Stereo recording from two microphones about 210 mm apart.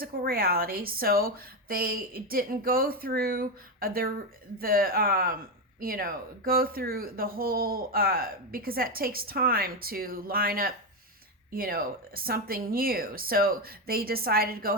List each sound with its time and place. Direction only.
0.0 s speech: 45° right (ahead or behind)